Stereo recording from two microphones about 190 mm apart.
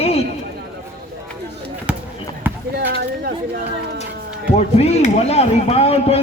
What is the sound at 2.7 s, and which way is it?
Speech, 55° right (ahead or behind).